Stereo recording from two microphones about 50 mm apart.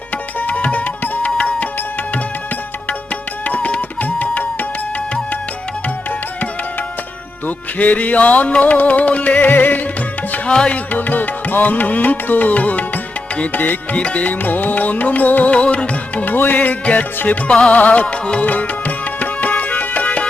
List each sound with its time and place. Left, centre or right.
0.3 s tabla: left
1.4 s music: left
3.4 s music: left
7.4 s music: left
10.5 s music: centre
10.9 s music: left
13.9 s music: left
15.4 s music: left
16.2 s music: left